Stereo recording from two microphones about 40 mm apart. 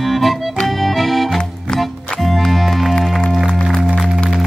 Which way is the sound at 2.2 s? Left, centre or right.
Centre.